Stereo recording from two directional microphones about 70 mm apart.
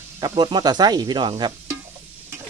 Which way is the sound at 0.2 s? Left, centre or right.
Right.